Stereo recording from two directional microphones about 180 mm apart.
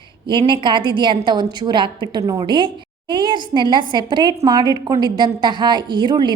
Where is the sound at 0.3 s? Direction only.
25° right (ahead or behind).